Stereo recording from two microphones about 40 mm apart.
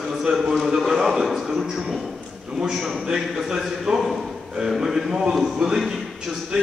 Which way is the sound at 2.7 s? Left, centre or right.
Centre.